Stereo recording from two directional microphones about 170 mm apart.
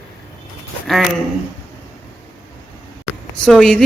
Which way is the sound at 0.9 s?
Centre (ahead or behind).